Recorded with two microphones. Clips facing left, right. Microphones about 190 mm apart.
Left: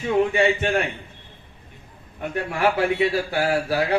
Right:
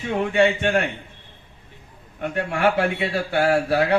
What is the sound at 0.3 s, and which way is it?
Speech, 65° right (ahead or behind).